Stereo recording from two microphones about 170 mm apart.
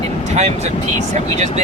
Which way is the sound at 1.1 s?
40° right (ahead or behind).